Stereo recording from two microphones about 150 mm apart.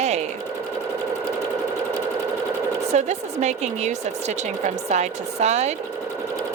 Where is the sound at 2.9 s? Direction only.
50° right (ahead or behind).